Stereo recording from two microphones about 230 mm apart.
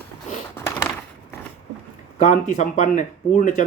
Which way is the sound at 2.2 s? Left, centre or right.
Left.